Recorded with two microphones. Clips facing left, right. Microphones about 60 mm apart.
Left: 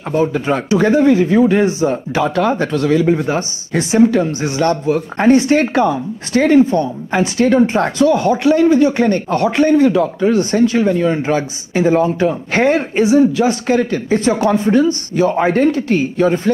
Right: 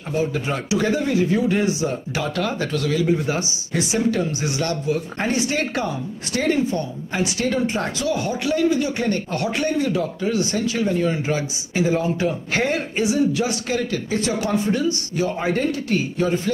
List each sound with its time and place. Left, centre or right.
0.1 s speech: left